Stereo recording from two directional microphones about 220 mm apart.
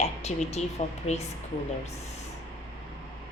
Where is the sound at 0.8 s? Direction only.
30° left (ahead or behind).